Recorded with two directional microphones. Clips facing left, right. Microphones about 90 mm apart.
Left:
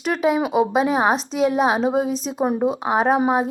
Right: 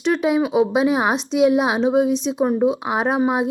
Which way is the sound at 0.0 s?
45° left (ahead or behind).